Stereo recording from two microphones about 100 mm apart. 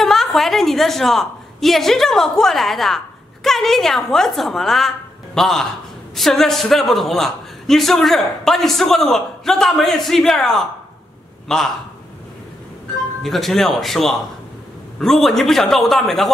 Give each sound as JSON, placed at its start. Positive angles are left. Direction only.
{"t": 0.0, "sound": "a woman's voice", "side_deg": 5}
{"t": 13.2, "sound": "a man's voice", "side_deg": 0}